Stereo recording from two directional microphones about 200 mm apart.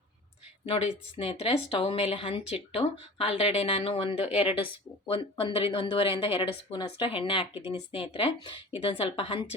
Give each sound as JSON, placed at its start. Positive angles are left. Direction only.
{"t": 0.6, "sound": "a woman's voice", "side_deg": 25}